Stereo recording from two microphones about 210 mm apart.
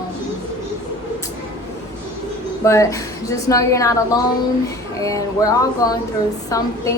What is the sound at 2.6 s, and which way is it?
A woman's voice, 15° left (ahead or behind).